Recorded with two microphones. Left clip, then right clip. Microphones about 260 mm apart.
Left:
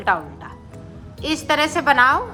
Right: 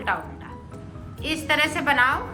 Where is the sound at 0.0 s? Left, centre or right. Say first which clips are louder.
Left 6 dB; centre.